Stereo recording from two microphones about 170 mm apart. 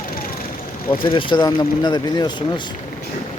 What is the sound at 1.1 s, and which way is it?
Speech, 30° left (ahead or behind).